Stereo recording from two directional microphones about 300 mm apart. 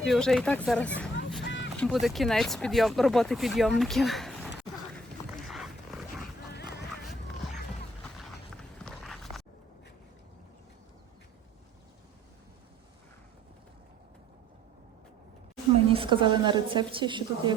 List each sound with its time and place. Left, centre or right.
0.0 s speech: centre
1.5 s vehicle: left
1.8 s speech: centre
5.5 s a sound: centre
8.8 s a sound: centre
15.9 s a woman's voice: centre